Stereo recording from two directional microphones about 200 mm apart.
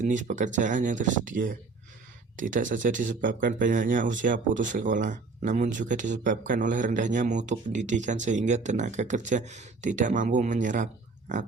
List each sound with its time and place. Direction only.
0.0 s speech: 40° right (ahead or behind)